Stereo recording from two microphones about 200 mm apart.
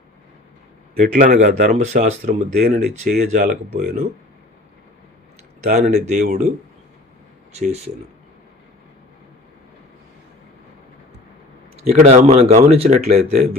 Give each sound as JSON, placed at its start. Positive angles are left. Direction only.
{"t": 0.9, "sound": "speech", "side_deg": -45}
{"t": 5.7, "sound": "speech", "side_deg": -35}
{"t": 7.5, "sound": "speech", "side_deg": -30}
{"t": 11.8, "sound": "speech", "side_deg": -35}